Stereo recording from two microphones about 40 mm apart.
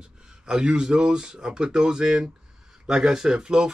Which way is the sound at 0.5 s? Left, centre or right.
Right.